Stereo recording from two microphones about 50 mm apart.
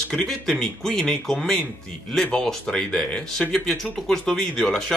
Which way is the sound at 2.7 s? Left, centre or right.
Centre.